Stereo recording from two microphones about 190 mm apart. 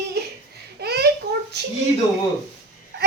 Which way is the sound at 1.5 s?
60° right (ahead or behind).